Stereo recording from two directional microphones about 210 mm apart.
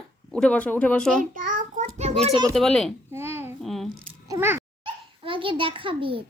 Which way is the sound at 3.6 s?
Centre (ahead or behind).